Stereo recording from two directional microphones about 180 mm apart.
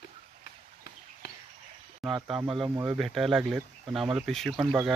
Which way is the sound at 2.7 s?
15° right (ahead or behind).